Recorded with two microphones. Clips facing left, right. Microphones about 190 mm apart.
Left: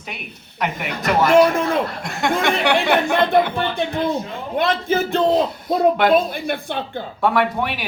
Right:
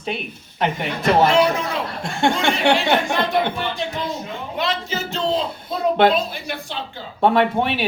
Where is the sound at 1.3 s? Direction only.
50° left (ahead or behind).